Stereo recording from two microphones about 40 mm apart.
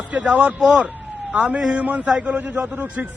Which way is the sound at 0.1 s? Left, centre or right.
Right.